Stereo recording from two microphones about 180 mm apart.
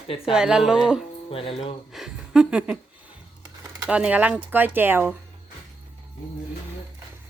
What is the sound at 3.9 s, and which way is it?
Speech, 5° right (ahead or behind).